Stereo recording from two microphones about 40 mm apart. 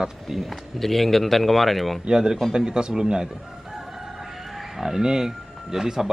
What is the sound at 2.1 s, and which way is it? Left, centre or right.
A man's voice, centre.